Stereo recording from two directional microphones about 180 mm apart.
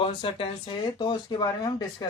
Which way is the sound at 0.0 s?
30° left (ahead or behind).